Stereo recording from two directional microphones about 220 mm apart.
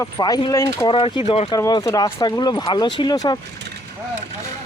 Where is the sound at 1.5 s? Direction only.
15° left (ahead or behind).